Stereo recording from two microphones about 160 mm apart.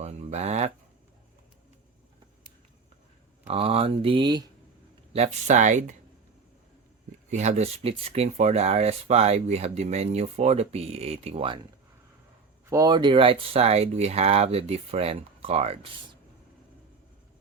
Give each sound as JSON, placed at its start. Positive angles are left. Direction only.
{"t": 0.0, "sound": "a sound", "side_deg": -45}
{"t": 3.4, "sound": "speech", "side_deg": -35}
{"t": 5.1, "sound": "speech", "side_deg": -45}
{"t": 7.3, "sound": "speech", "side_deg": -45}
{"t": 12.7, "sound": "speech", "side_deg": -25}